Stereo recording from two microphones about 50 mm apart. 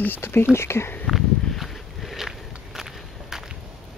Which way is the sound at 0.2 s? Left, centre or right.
Left.